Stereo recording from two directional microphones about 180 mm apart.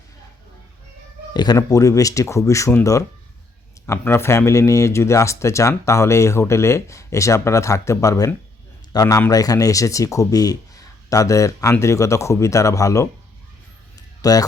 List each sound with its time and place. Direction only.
1.3 s speech: 25° left (ahead or behind)
14.2 s speech: 20° left (ahead or behind)